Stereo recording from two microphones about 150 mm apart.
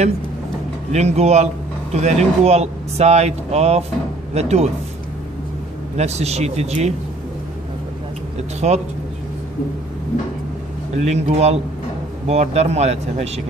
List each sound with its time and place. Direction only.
0.9 s speech: 45° right (ahead or behind)
5.9 s speech: 45° right (ahead or behind)
8.5 s speech: 50° right (ahead or behind)
11.0 s speech: 50° right (ahead or behind)